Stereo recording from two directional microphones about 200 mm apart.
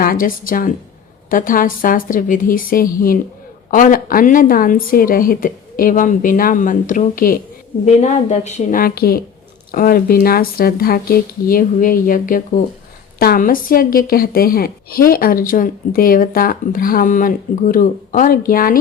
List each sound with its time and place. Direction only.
0.0 s a woman's voice: 45° left (ahead or behind)